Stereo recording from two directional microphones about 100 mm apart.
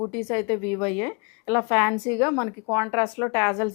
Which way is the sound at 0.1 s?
15° left (ahead or behind).